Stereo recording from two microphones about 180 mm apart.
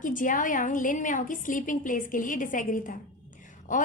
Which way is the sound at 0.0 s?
45° left (ahead or behind).